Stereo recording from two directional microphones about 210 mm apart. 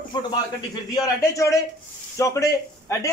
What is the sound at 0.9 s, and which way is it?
Speech, 15° left (ahead or behind).